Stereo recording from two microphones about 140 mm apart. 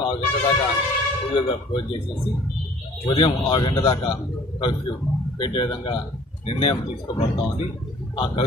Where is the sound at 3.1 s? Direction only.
40° left (ahead or behind).